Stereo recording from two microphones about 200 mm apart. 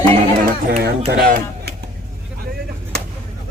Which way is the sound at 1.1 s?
50° right (ahead or behind).